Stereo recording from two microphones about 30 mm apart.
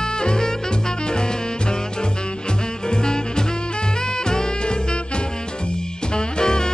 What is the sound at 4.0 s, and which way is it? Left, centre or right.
Swing music, left.